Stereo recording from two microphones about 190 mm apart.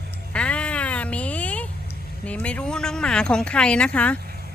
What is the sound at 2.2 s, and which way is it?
Speech, 5° left (ahead or behind).